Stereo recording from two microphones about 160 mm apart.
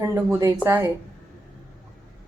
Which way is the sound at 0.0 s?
20° right (ahead or behind).